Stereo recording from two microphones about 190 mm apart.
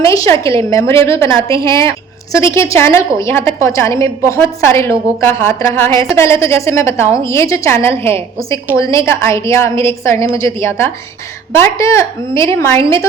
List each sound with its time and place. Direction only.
0.0 s a woman's voice: 15° left (ahead or behind)